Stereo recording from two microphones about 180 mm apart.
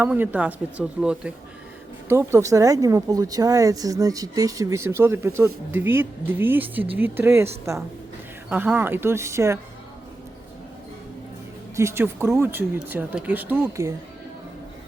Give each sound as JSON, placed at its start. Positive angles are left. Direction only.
{"t": 0.0, "sound": "speech", "side_deg": -10}
{"t": 11.8, "sound": "speech", "side_deg": -15}